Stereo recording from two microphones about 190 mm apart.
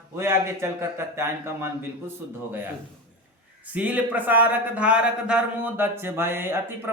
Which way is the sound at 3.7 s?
5° right (ahead or behind).